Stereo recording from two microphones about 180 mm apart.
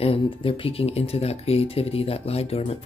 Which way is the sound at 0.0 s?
30° left (ahead or behind).